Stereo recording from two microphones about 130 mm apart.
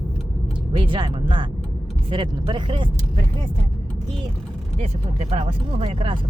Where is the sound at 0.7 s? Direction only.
40° right (ahead or behind).